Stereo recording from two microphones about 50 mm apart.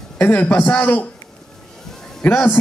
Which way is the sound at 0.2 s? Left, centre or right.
Left.